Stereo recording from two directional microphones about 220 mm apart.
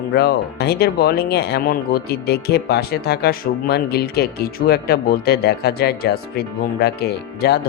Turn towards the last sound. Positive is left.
turn(degrees=45)  # may be behind; listen again after turning